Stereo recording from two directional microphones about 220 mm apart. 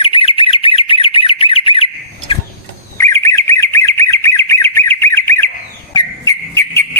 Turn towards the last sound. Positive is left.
turn(degrees=10)  # may be behind; listen again after turning